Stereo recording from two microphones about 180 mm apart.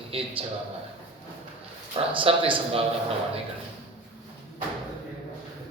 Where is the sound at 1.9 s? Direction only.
30° right (ahead or behind).